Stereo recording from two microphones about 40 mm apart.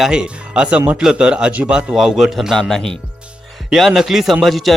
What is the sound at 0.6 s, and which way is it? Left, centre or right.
Speech, right.